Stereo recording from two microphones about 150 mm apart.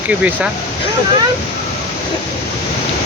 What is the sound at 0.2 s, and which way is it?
Speech, 10° right (ahead or behind).